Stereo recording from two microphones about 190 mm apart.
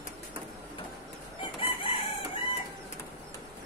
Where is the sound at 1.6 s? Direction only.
30° left (ahead or behind).